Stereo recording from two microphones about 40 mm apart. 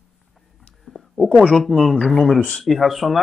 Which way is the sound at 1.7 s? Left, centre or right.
Right.